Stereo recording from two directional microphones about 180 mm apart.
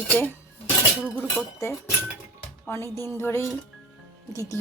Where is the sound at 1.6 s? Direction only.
15° left (ahead or behind).